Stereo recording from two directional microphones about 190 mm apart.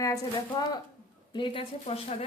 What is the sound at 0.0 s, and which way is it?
Speech, 20° left (ahead or behind).